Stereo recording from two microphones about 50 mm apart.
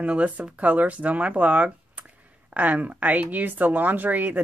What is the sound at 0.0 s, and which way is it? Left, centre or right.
Speech, right.